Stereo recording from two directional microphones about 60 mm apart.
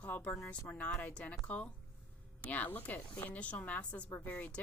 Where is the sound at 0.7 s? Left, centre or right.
Left.